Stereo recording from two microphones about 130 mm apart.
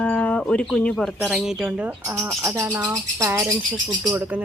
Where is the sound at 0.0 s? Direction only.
10° left (ahead or behind).